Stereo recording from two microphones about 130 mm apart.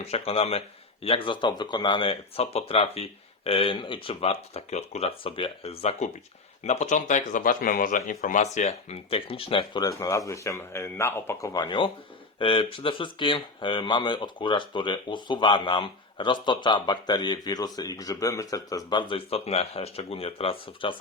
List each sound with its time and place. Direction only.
0.1 s speech: 50° left (ahead or behind)
6.7 s speech: 65° left (ahead or behind); by 8.4 s 90° left
8.5 s speech: 65° left (ahead or behind)
9.0 s speech: 45° left (ahead or behind)
10.0 s speech: 25° left (ahead or behind)
11.6 s speech: 40° left (ahead or behind)